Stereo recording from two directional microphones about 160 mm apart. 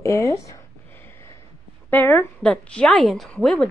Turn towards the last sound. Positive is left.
turn(degrees=5)  # may be behind; listen again after turning